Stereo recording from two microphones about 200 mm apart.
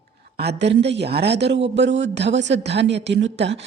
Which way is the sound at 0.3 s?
55° right (ahead or behind).